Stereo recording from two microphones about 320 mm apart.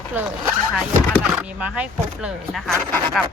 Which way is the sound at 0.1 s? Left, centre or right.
Centre.